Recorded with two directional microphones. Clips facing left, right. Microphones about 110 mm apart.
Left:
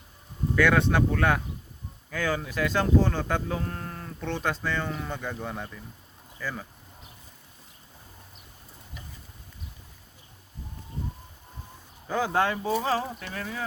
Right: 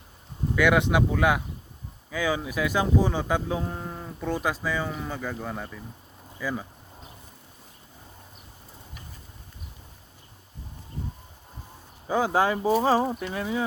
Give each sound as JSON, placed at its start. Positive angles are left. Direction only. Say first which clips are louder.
{"t": 0.5, "sound": "speech", "louder": "right 1 dB", "side_deg": -15}
{"t": 6.4, "sound": "speech", "louder": "right 4 dB", "side_deg": -10}
{"t": 12.0, "sound": "speech", "louder": "right 3 dB", "side_deg": -15}